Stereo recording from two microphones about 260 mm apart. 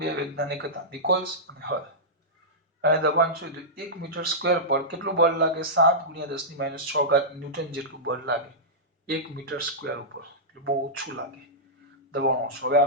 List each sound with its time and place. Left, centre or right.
0.0 s speech: right
2.8 s speech: right
12.6 s speech: right